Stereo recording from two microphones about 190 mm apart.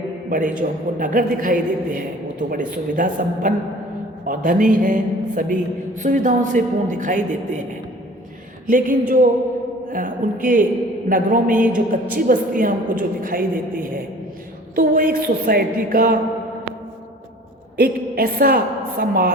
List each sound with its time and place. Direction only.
0.3 s speech: 45° right (ahead or behind)
8.6 s speech: 45° right (ahead or behind)
17.7 s speech: 50° right (ahead or behind)